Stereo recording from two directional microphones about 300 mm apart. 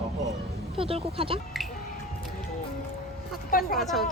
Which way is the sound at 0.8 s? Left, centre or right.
Centre.